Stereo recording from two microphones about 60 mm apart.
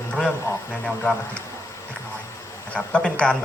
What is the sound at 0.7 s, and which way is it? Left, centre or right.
Speech, centre.